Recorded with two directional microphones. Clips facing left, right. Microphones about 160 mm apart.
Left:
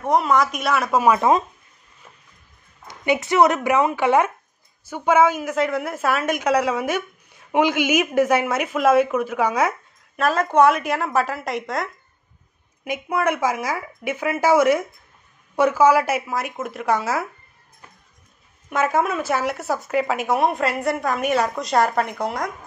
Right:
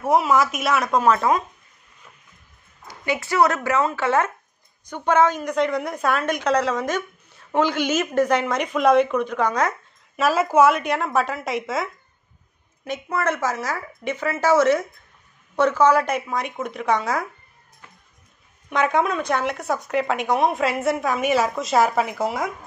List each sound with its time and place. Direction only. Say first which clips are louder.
0.0 s speech: even; 5° right (ahead or behind)
2.9 s a woman's voice: left 4 dB; 20° left (ahead or behind)
10.1 s speech: even; 5° right (ahead or behind)
12.8 s a woman's voice: left 2 dB; 10° left (ahead or behind)
18.7 s speech: even; 5° left (ahead or behind)